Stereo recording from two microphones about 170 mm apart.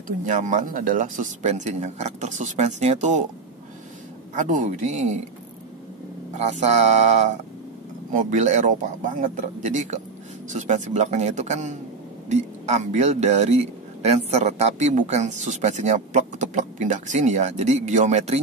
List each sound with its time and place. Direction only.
0.3 s speech: 45° right (ahead or behind)
4.4 s speech: 50° right (ahead or behind)
6.3 s speech: 40° right (ahead or behind)